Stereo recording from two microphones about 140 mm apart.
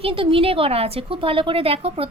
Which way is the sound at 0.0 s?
40° right (ahead or behind).